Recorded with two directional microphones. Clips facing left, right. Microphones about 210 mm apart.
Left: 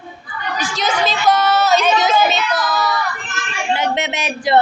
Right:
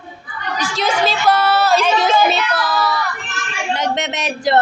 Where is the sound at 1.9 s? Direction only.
30° right (ahead or behind).